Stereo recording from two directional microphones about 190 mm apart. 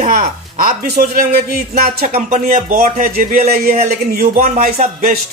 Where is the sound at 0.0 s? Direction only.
40° right (ahead or behind).